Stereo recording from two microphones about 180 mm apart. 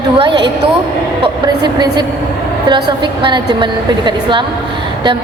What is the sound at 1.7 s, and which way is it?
A woman's voice, 25° right (ahead or behind).